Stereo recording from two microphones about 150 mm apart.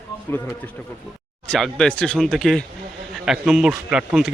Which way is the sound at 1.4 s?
5° left (ahead or behind).